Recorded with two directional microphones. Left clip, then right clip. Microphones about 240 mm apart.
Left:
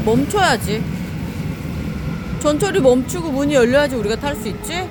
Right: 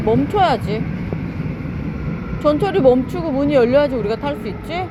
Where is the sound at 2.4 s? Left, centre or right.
Centre.